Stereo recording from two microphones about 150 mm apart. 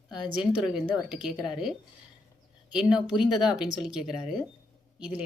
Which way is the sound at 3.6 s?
30° left (ahead or behind).